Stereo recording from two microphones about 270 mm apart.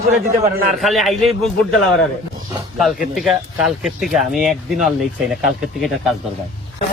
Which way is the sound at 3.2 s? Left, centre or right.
Centre.